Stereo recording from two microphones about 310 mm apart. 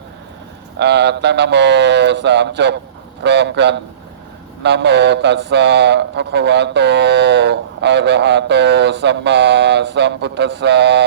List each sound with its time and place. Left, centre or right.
0.8 s speech: right